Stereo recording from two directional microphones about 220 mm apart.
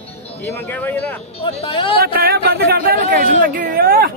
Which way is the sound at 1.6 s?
25° left (ahead or behind).